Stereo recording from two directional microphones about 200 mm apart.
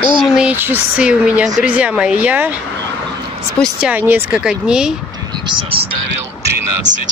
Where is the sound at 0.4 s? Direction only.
10° right (ahead or behind).